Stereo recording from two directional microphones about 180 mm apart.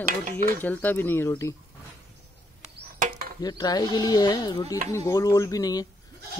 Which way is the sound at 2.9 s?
45° right (ahead or behind).